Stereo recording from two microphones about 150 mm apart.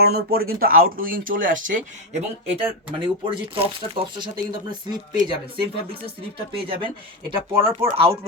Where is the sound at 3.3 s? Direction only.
35° right (ahead or behind).